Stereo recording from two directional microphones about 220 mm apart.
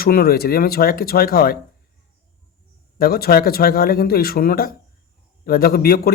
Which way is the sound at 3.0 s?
45° left (ahead or behind).